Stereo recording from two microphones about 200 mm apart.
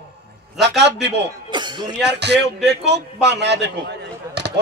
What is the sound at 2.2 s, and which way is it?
Speech, 55° right (ahead or behind).